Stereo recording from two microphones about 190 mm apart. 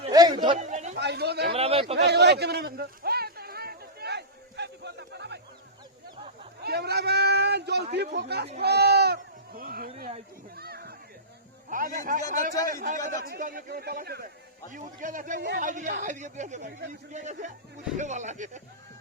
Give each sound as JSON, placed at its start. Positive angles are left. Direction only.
{"t": 0.1, "sound": "a sound", "side_deg": -20}
{"t": 0.6, "sound": "chatter", "side_deg": -35}
{"t": 0.9, "sound": "speech", "side_deg": -60}
{"t": 1.5, "sound": "speech", "side_deg": -30}
{"t": 2.0, "sound": "a sound", "side_deg": -60}
{"t": 6.6, "sound": "speech", "side_deg": -60}
{"t": 10.5, "sound": "children playing", "side_deg": -55}
{"t": 11.7, "sound": "speech", "side_deg": -45}